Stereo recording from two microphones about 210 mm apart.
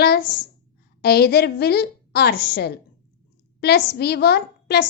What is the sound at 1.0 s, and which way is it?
A woman's voice, 50° left (ahead or behind).